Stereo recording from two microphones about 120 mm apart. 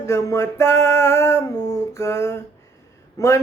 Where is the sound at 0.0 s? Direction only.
25° left (ahead or behind).